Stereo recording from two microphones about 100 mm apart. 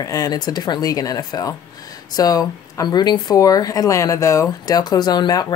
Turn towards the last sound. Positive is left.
turn(degrees=40)  # may be behind; listen again after turning